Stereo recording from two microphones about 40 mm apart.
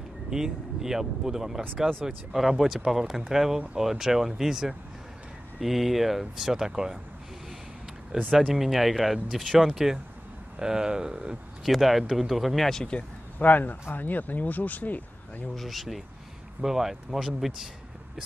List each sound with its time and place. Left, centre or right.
0.3 s speech: centre
8.4 s speech: centre
10.6 s speech: centre
11.6 s speech: centre
12.9 s speech: left
13.4 s speech: left
15.5 s speech: centre